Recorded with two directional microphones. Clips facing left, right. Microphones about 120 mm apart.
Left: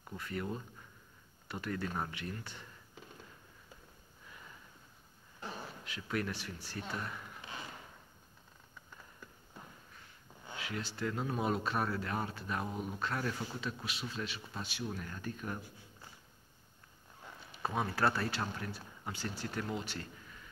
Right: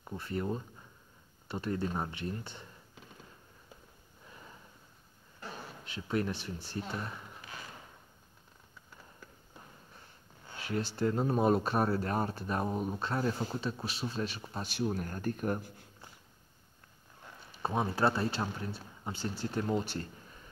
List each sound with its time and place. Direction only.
0.0 s speech: 30° right (ahead or behind)
5.9 s speech: 30° right (ahead or behind)
10.6 s speech: 40° right (ahead or behind)
17.6 s speech: 25° right (ahead or behind)